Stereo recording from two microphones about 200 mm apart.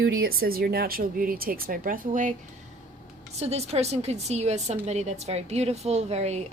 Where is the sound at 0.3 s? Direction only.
50° right (ahead or behind).